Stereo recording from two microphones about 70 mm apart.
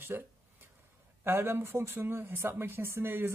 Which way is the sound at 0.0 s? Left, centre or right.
Right.